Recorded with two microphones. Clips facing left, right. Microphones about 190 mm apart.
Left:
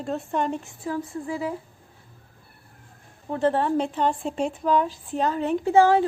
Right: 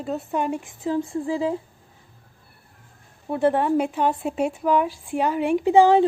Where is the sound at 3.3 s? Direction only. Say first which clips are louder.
Right 2 dB; 10° right (ahead or behind).